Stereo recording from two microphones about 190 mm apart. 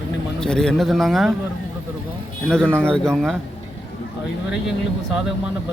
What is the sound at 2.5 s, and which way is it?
Speech, 5° left (ahead or behind).